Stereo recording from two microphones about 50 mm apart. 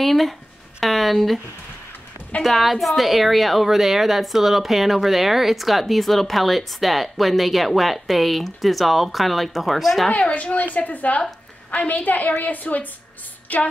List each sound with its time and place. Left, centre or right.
0.0 s a sound: centre
2.4 s a woman's voice: centre
10.1 s a woman's voice: left